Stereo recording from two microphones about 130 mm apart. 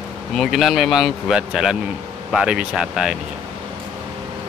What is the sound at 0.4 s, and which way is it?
Speech, centre (ahead or behind).